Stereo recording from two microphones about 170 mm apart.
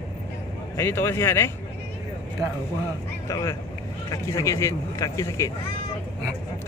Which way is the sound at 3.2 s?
15° left (ahead or behind).